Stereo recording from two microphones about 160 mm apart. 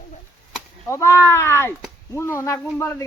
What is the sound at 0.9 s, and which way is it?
A man's voice, 15° left (ahead or behind).